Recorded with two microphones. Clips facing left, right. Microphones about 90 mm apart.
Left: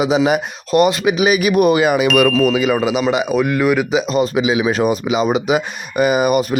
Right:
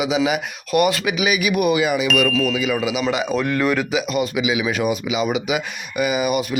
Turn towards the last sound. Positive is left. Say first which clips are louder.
# left 6 dB
turn(degrees=45)  # may be behind; listen again after turning